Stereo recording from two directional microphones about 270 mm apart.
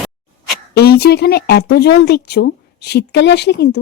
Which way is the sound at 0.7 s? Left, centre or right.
Left.